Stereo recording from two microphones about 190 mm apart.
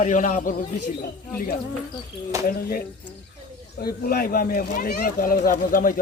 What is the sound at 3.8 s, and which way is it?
Speech, 50° left (ahead or behind).